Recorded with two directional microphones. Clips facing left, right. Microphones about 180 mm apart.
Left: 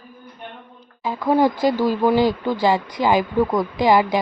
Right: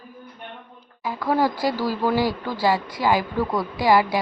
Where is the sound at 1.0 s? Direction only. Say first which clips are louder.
Left 4 dB; 25° left (ahead or behind).